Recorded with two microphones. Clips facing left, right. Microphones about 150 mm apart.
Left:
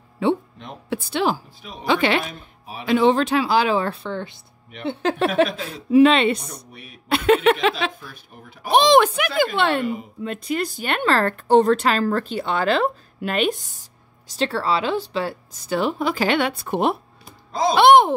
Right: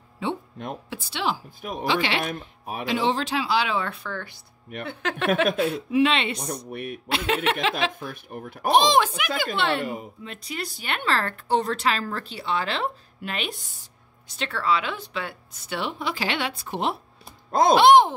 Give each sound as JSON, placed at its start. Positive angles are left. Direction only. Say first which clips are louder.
{"t": 0.8, "sound": "a woman's voice", "louder": "left 8 dB", "side_deg": 55}
{"t": 1.6, "sound": "speech", "louder": "right 6 dB", "side_deg": -50}
{"t": 1.9, "sound": "a woman's voice", "louder": "left 6 dB", "side_deg": 50}
{"t": 2.2, "sound": "speech", "louder": "right 4 dB", "side_deg": -50}
{"t": 2.9, "sound": "a woman's voice", "louder": "left 8 dB", "side_deg": 55}
{"t": 5.9, "sound": "a woman's voice", "louder": "left 11 dB", "side_deg": 40}
{"t": 6.7, "sound": "speech", "louder": "right 11 dB", "side_deg": -55}
{"t": 7.1, "sound": "a woman's voice", "louder": "left 9 dB", "side_deg": 55}
{"t": 7.9, "sound": "speech", "louder": "right 6 dB", "side_deg": -55}
{"t": 8.7, "sound": "a woman's voice", "louder": "left 5 dB", "side_deg": 65}
{"t": 14.2, "sound": "speech", "louder": "left 5 dB", "side_deg": 35}
{"t": 17.5, "sound": "speech", "louder": "right 2 dB", "side_deg": -55}
{"t": 17.7, "sound": "speech", "louder": "left 3 dB", "side_deg": 60}